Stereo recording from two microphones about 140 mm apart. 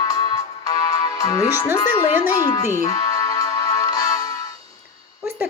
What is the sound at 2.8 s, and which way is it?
Music, 25° left (ahead or behind).